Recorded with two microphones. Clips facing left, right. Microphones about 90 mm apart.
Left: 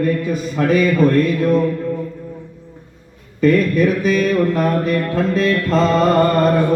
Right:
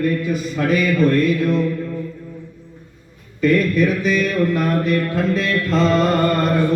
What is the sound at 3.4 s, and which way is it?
A man's voice, 40° left (ahead or behind).